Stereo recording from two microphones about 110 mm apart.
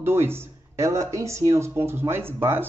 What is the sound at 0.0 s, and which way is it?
Speech, 20° right (ahead or behind).